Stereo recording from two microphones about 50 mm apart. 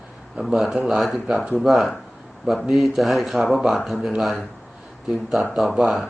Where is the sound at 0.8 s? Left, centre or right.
Centre.